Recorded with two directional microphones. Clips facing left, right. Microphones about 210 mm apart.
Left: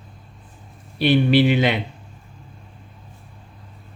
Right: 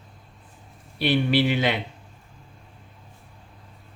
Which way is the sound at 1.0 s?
20° left (ahead or behind).